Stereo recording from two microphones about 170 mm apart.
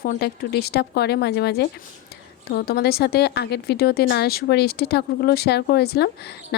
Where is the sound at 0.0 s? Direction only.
65° left (ahead or behind).